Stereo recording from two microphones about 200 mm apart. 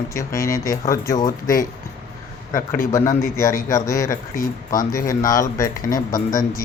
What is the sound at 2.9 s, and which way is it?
Speech, 15° left (ahead or behind).